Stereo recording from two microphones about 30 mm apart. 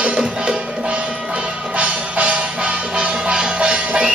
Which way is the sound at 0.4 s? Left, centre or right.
Right.